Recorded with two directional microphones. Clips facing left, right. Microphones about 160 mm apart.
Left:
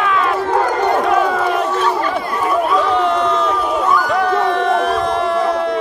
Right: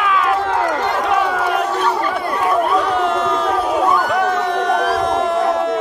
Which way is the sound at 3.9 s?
20° right (ahead or behind).